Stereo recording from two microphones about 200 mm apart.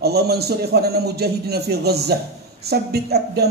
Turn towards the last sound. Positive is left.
turn(degrees=-55)  # may be behind; listen again after turning